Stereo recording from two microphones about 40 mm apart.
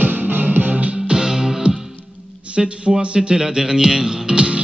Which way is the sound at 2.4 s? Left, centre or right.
Right.